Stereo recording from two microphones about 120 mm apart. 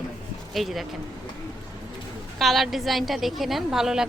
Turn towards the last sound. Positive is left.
turn(degrees=-5)  # may be behind; listen again after turning